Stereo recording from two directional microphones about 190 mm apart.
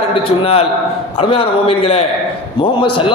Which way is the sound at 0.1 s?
30° left (ahead or behind).